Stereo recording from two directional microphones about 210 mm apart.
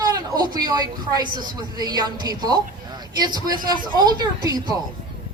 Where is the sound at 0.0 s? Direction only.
20° right (ahead or behind).